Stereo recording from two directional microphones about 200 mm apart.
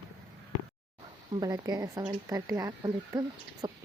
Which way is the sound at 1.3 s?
20° right (ahead or behind).